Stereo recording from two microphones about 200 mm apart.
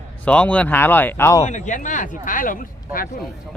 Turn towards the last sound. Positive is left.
turn(degrees=45)  # may be behind; listen again after turning